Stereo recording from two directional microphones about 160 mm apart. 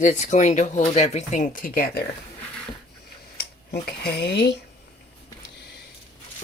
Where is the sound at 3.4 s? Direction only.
85° left.